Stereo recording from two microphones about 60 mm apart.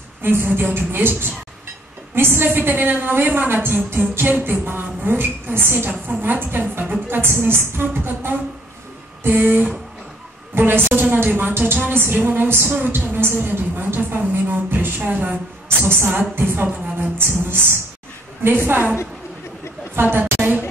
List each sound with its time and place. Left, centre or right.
0.2 s a woman's voice: right
20.0 s a woman's voice: right